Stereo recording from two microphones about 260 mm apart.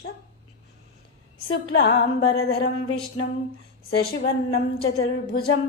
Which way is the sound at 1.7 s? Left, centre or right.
Left.